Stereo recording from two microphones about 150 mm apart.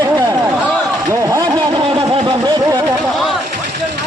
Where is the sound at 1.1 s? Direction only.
25° right (ahead or behind).